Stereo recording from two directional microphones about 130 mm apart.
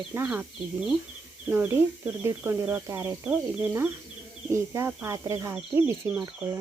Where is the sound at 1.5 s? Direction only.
15° right (ahead or behind).